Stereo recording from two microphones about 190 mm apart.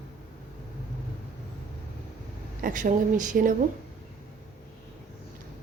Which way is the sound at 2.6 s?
40° right (ahead or behind).